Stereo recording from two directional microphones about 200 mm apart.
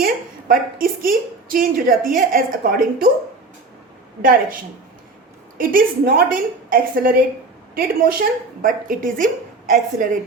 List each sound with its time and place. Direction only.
0.0 s a woman's voice: 45° right (ahead or behind)
4.2 s a woman's voice: 45° right (ahead or behind)